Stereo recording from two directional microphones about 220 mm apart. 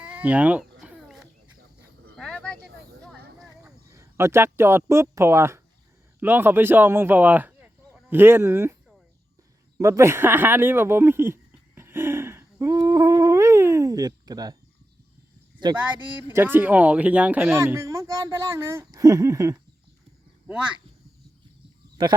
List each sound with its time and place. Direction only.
0.0 s cat: 5° right (ahead or behind)
2.1 s a sound: 5° left (ahead or behind)
3.6 s a sound: 15° right (ahead or behind)
4.9 s speech: 10° right (ahead or behind)
9.7 s speech: 15° right (ahead or behind)
15.7 s speech: 5° right (ahead or behind)